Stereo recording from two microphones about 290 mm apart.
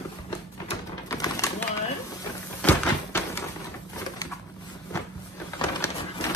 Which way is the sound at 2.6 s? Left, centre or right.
Centre.